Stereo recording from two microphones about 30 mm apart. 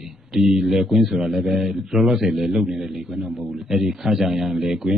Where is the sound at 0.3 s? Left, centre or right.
Centre.